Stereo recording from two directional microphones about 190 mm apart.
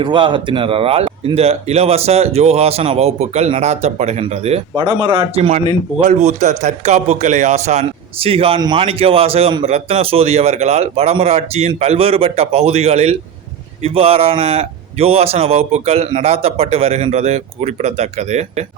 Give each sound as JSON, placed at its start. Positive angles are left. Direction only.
{"t": 0.0, "sound": "a man's voice", "side_deg": -25}